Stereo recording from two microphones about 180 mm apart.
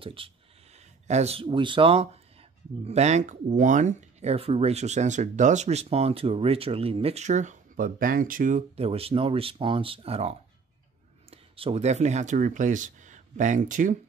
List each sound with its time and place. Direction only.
0.0 s speech: 30° right (ahead or behind); by 13.9 s 45° right (ahead or behind)